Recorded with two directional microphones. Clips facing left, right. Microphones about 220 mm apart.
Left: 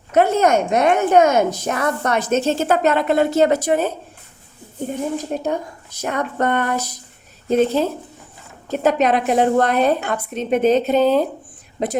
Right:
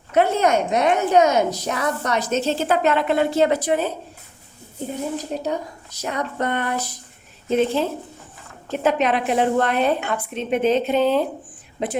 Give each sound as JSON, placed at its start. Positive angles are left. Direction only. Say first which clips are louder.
{"t": 0.1, "sound": "speech", "louder": "left 3 dB", "side_deg": 45}
{"t": 5.1, "sound": "a woman's voice", "louder": "left 3 dB", "side_deg": 50}